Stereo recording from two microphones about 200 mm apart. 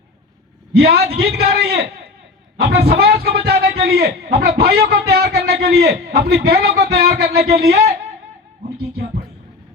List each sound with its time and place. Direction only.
0.8 s a man's voice: 55° right (ahead or behind)